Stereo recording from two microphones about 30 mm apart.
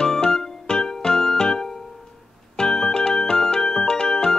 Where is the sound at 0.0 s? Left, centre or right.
Left.